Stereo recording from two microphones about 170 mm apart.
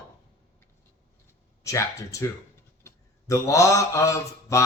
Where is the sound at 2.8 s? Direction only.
20° left (ahead or behind).